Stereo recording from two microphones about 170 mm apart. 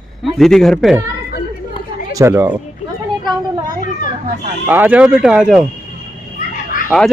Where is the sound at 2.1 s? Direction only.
15° right (ahead or behind).